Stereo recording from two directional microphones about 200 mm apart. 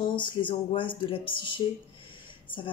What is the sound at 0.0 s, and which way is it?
Speech, 25° left (ahead or behind).